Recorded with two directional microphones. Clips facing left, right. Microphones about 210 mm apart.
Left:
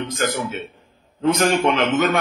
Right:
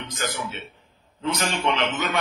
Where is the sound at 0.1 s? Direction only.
50° left (ahead or behind).